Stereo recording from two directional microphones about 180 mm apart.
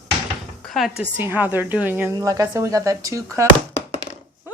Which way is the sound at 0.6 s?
Centre (ahead or behind).